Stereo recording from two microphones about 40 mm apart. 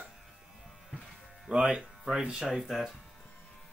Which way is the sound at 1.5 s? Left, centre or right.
Right.